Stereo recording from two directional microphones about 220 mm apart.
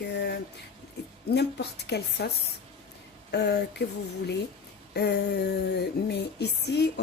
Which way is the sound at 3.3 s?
50° left (ahead or behind).